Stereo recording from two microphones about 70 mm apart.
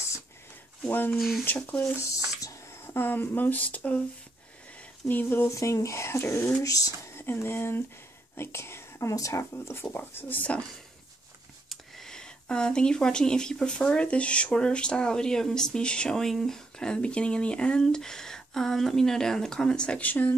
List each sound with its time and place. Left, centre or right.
0.8 s speech: left
1.1 s speech: centre
1.4 s speech: left
1.8 s speech: left
5.0 s speech: left
5.5 s speech: left
6.6 s speech: left
7.2 s speech: left
11.7 s speech: centre; by 20.3 s left